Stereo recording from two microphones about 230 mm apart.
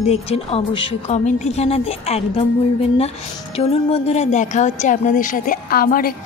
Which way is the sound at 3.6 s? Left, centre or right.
Left.